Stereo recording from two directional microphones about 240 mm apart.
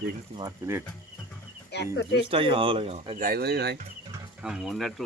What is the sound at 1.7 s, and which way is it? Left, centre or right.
Speech, left.